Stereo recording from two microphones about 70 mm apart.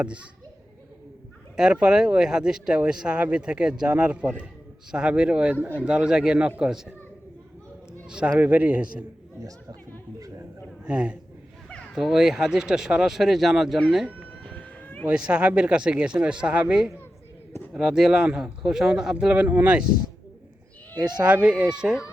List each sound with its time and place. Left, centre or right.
1.5 s speech: centre
8.0 s a man's voice: centre
8.4 s a man's voice: right
9.4 s speech: right
10.2 s a sound: right
10.8 s speech: centre
14.4 s cat: centre
15.1 s speech: centre
21.2 s speech: centre